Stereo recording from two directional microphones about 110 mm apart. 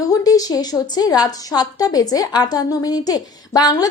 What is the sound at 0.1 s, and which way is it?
A woman's voice, 35° left (ahead or behind).